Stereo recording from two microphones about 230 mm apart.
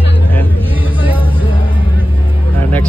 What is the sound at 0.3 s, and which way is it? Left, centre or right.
Hubbub, centre.